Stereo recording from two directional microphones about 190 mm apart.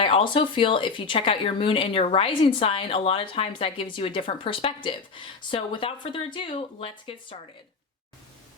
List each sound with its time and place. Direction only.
0.0 s speech: 30° left (ahead or behind)